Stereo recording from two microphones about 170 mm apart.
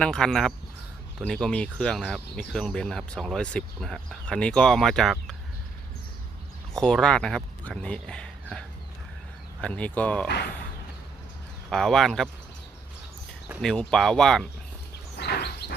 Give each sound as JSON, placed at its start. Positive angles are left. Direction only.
{"t": 0.0, "sound": "speech", "side_deg": 5}
{"t": 6.7, "sound": "speech", "side_deg": 5}
{"t": 11.7, "sound": "speech", "side_deg": 5}
{"t": 13.6, "sound": "speech", "side_deg": 5}
{"t": 15.2, "sound": "bird", "side_deg": 75}